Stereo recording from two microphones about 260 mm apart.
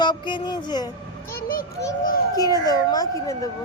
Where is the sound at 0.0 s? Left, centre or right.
Centre.